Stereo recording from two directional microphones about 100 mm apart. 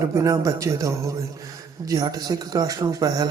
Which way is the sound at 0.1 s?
30° right (ahead or behind).